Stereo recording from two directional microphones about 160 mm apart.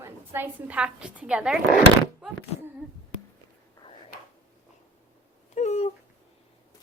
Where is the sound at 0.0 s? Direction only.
15° right (ahead or behind).